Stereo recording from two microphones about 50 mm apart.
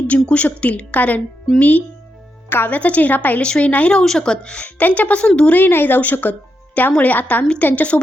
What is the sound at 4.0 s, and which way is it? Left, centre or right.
Speech, centre.